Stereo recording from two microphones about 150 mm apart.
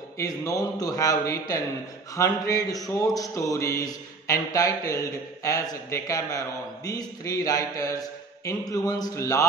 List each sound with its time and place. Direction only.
0.2 s a man's voice: 20° left (ahead or behind)